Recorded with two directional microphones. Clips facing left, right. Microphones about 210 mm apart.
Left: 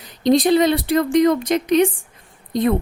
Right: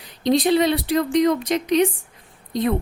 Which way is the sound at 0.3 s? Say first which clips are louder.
Left 3 dB; 45° left (ahead or behind).